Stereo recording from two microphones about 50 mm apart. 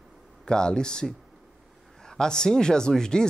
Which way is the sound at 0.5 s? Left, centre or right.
Centre.